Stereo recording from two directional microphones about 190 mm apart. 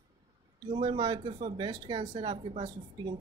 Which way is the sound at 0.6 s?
25° right (ahead or behind).